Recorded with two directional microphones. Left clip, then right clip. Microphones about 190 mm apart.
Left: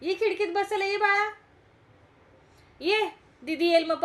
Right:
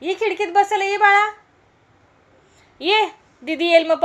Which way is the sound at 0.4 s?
15° right (ahead or behind).